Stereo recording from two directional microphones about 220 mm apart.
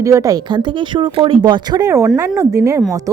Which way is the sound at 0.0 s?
15° right (ahead or behind).